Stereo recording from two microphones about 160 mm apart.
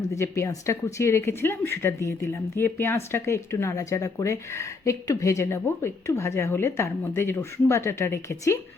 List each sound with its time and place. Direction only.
0.0 s a woman's voice: 15° left (ahead or behind)